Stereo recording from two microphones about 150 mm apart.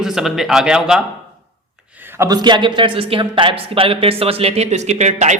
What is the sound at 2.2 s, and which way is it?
Speech, 25° right (ahead or behind).